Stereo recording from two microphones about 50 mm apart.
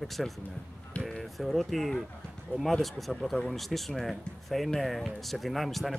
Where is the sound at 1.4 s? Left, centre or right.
Centre.